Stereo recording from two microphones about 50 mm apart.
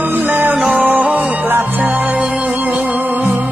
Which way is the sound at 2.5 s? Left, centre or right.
Right.